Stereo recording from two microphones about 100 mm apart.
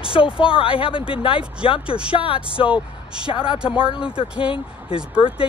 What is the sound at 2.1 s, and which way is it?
Speech, 65° left (ahead or behind).